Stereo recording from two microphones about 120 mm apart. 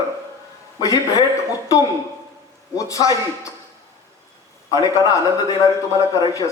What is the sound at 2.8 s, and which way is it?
Speech, 30° left (ahead or behind).